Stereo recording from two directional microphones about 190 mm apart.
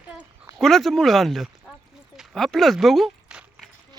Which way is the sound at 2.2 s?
Centre (ahead or behind).